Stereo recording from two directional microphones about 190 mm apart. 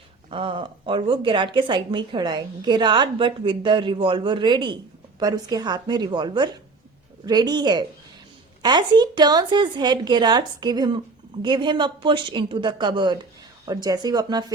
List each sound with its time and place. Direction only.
0.3 s speech: 25° right (ahead or behind)